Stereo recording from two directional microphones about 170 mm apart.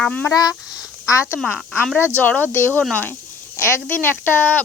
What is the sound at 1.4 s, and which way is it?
Speech, 5° left (ahead or behind).